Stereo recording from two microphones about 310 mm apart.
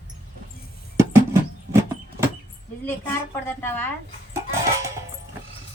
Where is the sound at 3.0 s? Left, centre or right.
Centre.